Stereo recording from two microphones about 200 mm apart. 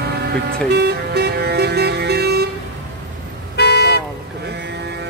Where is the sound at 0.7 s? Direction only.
55° right (ahead or behind).